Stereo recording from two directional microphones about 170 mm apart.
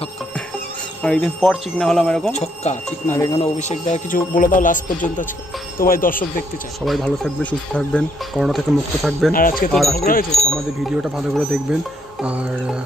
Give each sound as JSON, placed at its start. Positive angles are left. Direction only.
{"t": 1.0, "sound": "speech", "side_deg": 5}
{"t": 2.3, "sound": "speech", "side_deg": 40}
{"t": 3.1, "sound": "speech", "side_deg": 20}
{"t": 3.3, "sound": "speech", "side_deg": 40}
{"t": 6.8, "sound": "speech", "side_deg": 0}
{"t": 9.3, "sound": "speech", "side_deg": 55}
{"t": 9.7, "sound": "speech", "side_deg": 0}
{"t": 9.9, "sound": "speech", "side_deg": 60}
{"t": 10.5, "sound": "speech", "side_deg": -5}
{"t": 12.2, "sound": "music", "side_deg": -5}